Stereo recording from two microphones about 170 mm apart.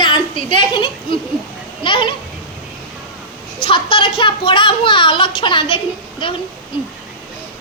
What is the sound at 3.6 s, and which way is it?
Speech, 30° left (ahead or behind).